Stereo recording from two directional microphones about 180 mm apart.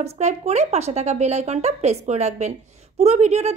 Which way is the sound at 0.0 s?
40° right (ahead or behind).